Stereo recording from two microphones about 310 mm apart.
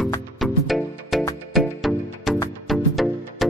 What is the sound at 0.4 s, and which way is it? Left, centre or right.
Music, centre.